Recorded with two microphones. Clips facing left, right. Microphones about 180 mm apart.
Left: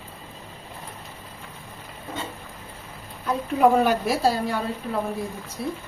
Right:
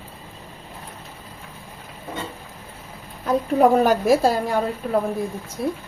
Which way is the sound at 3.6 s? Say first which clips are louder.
Right 2 dB; 40° right (ahead or behind).